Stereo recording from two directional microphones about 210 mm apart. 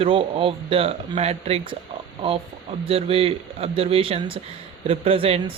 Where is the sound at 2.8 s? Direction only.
25° right (ahead or behind).